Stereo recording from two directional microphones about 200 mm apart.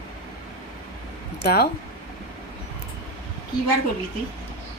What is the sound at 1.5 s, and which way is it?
Speech, 50° left (ahead or behind).